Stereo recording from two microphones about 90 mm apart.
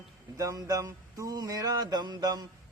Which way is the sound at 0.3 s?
40° right (ahead or behind).